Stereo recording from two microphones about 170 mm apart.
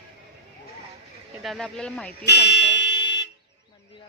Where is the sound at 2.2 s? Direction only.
85° left.